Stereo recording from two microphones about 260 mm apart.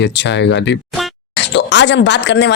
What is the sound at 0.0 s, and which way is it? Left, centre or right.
A woman's voice, left.